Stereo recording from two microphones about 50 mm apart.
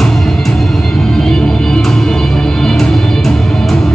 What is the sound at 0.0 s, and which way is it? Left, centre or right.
Music, centre.